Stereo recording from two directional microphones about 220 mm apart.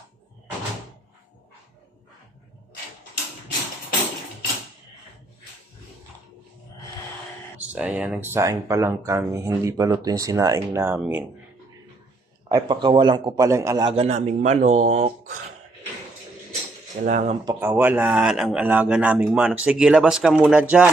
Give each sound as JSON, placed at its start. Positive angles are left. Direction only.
{"t": 7.7, "sound": "speech", "side_deg": -5}
{"t": 12.5, "sound": "a man's voice", "side_deg": -20}
{"t": 17.1, "sound": "speech", "side_deg": -35}
{"t": 17.4, "sound": "speech", "side_deg": -10}